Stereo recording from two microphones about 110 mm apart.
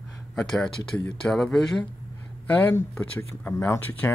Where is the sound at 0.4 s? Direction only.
5° left (ahead or behind).